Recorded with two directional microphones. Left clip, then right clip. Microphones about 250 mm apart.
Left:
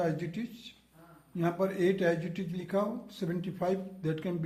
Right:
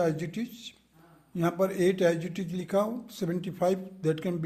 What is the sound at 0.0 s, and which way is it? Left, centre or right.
A man's voice, right.